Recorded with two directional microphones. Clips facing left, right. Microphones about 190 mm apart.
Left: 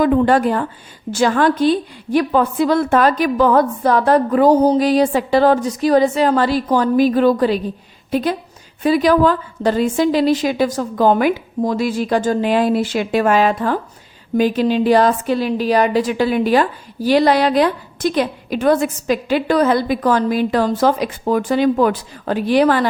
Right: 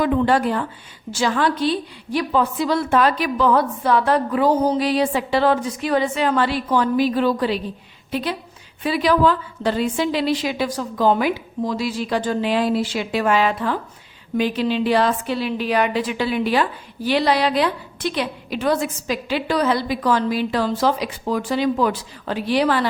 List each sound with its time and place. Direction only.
0.0 s a woman's voice: 45° left (ahead or behind)